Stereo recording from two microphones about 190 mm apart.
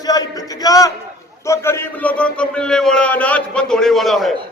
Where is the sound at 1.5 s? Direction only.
15° left (ahead or behind).